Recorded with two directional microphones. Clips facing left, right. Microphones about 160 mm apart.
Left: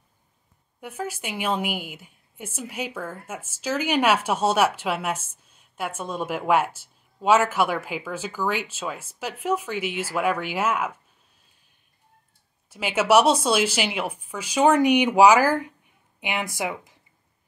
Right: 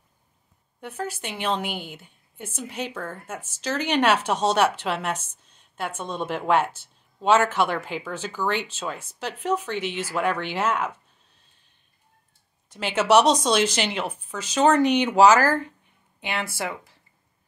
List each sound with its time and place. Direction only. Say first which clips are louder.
0.7 s a woman's voice: even; 10° left (ahead or behind)
12.6 s a woman's voice: even; 5° left (ahead or behind)